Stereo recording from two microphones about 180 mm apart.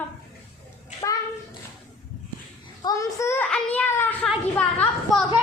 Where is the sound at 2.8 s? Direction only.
20° left (ahead or behind); by 5.2 s 5° left (ahead or behind).